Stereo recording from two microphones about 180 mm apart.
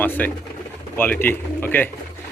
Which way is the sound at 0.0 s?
10° left (ahead or behind).